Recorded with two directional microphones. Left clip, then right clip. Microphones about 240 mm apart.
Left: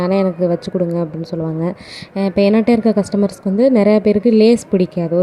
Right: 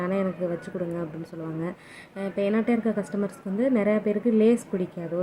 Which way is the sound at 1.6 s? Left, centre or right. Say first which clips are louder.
Left 11 dB; left.